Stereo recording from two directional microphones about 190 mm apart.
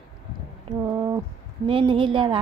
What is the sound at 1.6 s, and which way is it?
Speech, 25° right (ahead or behind).